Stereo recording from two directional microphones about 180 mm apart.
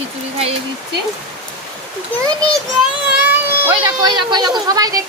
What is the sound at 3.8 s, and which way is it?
A child's voice, 25° right (ahead or behind).